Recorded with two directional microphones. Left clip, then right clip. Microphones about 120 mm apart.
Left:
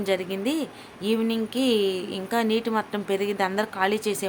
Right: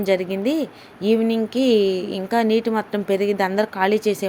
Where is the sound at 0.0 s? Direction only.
30° right (ahead or behind).